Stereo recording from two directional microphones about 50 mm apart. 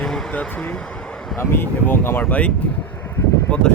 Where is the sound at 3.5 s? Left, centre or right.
Left.